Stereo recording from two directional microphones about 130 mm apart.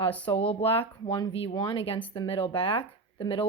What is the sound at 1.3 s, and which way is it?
A woman's voice, 45° left (ahead or behind).